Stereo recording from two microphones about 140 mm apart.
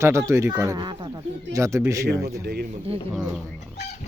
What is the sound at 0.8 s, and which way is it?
Speech, 35° right (ahead or behind).